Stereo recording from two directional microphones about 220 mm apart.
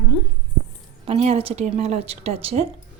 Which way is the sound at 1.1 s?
30° right (ahead or behind).